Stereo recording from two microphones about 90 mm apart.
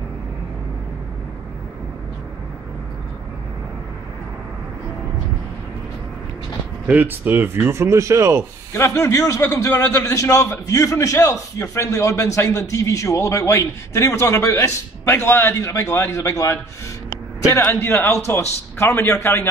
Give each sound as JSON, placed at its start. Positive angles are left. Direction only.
{"t": 6.9, "sound": "speech", "side_deg": -20}
{"t": 8.7, "sound": "a man's voice", "side_deg": 30}
{"t": 17.6, "sound": "a man's voice", "side_deg": 25}